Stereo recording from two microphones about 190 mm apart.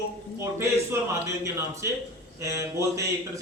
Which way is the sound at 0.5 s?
15° right (ahead or behind).